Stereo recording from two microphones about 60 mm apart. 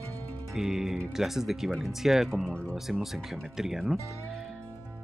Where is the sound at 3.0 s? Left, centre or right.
Centre.